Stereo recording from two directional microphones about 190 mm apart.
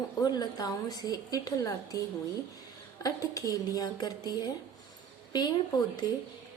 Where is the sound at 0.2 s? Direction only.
20° left (ahead or behind).